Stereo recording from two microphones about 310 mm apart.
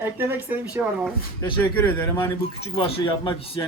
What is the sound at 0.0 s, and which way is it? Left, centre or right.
Speech, centre.